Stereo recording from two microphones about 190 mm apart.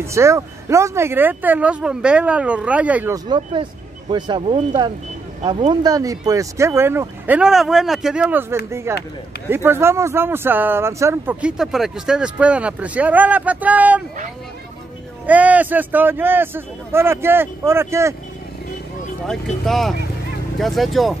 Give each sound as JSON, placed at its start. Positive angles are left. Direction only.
{"t": 0.0, "sound": "speech", "side_deg": -15}
{"t": 3.3, "sound": "speech", "side_deg": -25}
{"t": 15.2, "sound": "speech", "side_deg": -10}
{"t": 19.2, "sound": "speech", "side_deg": 0}